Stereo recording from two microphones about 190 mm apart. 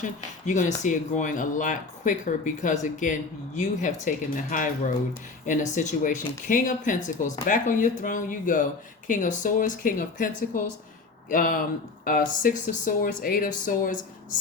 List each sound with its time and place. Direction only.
0.0 s speech: 40° left (ahead or behind)